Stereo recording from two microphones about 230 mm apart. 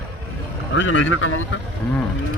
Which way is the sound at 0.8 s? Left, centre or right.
Left.